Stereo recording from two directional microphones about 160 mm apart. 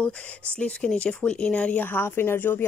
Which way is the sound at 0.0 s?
10° left (ahead or behind).